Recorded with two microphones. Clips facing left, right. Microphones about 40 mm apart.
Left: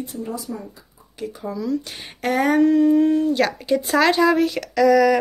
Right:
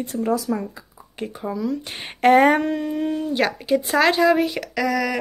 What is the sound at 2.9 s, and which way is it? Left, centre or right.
Speech, centre.